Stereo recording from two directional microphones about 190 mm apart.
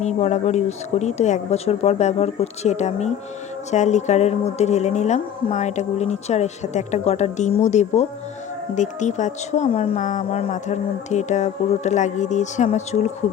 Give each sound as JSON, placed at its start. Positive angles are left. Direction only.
{"t": 0.0, "sound": "speech", "side_deg": 35}